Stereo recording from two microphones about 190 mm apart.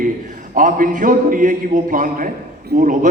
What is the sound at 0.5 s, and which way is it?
A man's voice, 45° right (ahead or behind).